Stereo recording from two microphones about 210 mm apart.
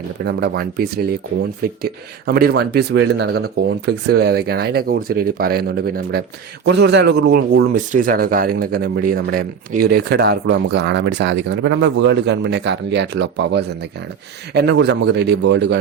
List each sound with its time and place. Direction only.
0.3 s speech: 50° right (ahead or behind)